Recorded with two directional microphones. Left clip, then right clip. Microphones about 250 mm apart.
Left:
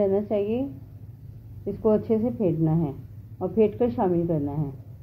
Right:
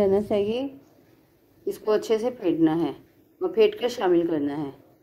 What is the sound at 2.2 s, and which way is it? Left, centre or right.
A woman's voice, right.